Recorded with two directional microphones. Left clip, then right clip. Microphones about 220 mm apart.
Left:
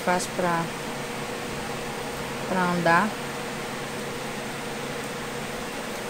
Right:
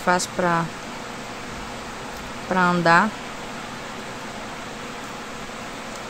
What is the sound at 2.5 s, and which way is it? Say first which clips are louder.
Speech: right 5 dB; 15° right (ahead or behind).